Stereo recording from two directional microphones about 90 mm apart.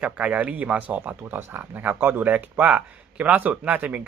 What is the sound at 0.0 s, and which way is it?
Speech, 15° right (ahead or behind).